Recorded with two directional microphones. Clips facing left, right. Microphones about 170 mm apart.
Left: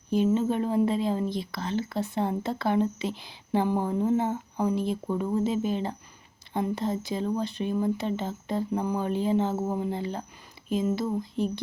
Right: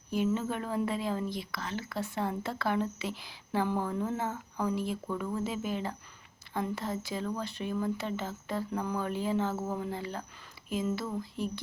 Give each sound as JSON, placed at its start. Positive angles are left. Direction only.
{"t": 0.3, "sound": "speech", "side_deg": 25}